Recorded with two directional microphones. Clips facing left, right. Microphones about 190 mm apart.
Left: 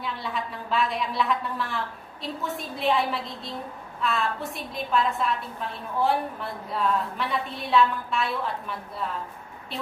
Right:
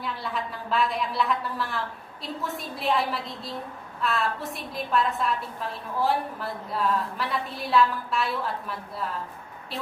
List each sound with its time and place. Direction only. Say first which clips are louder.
0.0 s a woman's voice: even; centre (ahead or behind)